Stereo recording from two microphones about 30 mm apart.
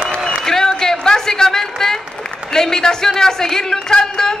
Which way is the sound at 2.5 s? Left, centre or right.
Centre.